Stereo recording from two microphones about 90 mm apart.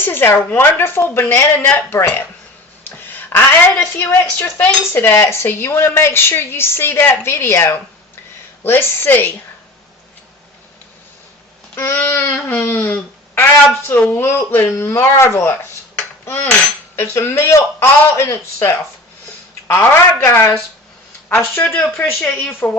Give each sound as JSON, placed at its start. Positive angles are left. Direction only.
{"t": 0.0, "sound": "a woman's voice", "side_deg": 25}
{"t": 3.3, "sound": "speech", "side_deg": 25}
{"t": 11.7, "sound": "speech", "side_deg": 25}
{"t": 16.2, "sound": "a sound", "side_deg": 25}
{"t": 16.9, "sound": "speech", "side_deg": 25}